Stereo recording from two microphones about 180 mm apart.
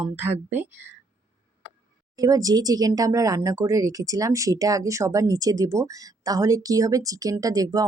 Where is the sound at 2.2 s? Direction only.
20° right (ahead or behind).